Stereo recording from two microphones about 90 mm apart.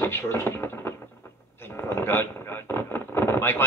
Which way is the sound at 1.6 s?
25° left (ahead or behind).